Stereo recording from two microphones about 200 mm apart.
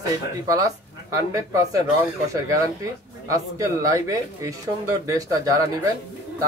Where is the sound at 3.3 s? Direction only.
15° right (ahead or behind).